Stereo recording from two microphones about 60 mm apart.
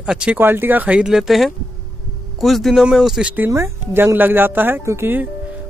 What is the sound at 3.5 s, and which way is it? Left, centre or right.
Speech, right.